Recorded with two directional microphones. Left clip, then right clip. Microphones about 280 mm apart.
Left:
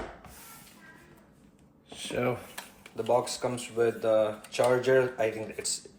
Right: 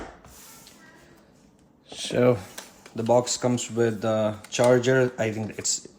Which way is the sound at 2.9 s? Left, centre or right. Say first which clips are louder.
Right 5 dB; right.